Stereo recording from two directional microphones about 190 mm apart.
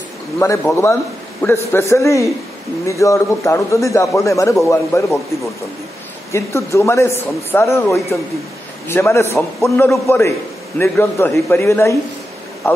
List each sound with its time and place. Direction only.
0.4 s a man's voice: 15° left (ahead or behind)
6.3 s a man's voice: 15° left (ahead or behind)